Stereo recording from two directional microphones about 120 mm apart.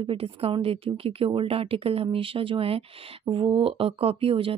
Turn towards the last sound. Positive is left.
turn(degrees=-50)  # may be behind; listen again after turning